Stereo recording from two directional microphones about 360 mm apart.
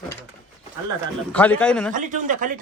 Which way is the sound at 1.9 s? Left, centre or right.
Right.